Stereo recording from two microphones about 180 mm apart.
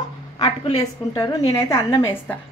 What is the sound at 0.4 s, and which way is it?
A woman's voice, 20° left (ahead or behind).